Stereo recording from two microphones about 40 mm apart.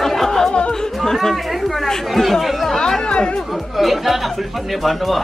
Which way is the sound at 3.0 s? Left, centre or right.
Left.